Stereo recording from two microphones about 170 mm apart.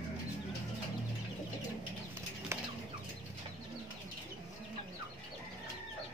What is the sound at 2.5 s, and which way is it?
Bird, 15° right (ahead or behind).